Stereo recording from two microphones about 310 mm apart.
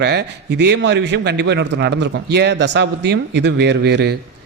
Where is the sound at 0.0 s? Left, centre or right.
Right.